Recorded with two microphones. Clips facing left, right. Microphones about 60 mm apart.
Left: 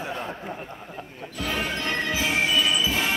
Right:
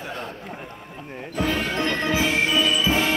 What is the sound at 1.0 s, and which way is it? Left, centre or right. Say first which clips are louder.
Speech: right 4 dB; right.